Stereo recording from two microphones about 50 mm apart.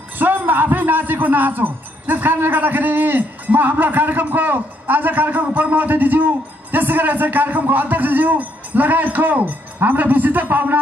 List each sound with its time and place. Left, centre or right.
0.2 s a man's voice: right